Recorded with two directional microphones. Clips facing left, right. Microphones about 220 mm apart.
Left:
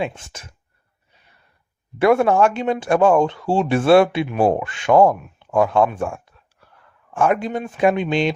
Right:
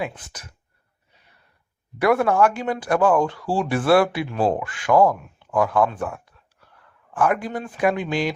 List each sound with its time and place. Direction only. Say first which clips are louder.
0.0 s speech: left 4 dB; 25° left (ahead or behind)
2.0 s speech: left 3 dB; 25° left (ahead or behind)